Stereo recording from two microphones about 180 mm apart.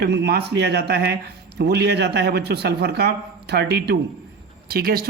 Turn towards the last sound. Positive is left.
turn(degrees=-55)  # may be behind; listen again after turning